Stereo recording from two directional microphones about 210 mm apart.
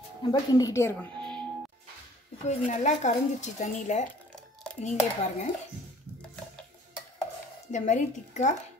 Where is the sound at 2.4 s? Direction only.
35° left (ahead or behind).